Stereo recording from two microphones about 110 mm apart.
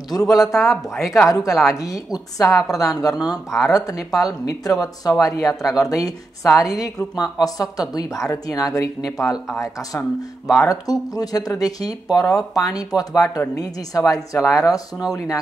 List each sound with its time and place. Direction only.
0.1 s speech: 30° left (ahead or behind)
0.8 s a woman's voice: centre (ahead or behind)
1.3 s speech: 30° left (ahead or behind)